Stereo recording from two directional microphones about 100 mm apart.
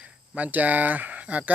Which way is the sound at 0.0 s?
15° right (ahead or behind).